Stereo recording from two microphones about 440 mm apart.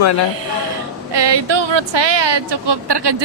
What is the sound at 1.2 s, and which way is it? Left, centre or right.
A woman's voice, right.